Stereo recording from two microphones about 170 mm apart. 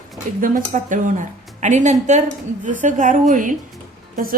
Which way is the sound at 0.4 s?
50° right (ahead or behind).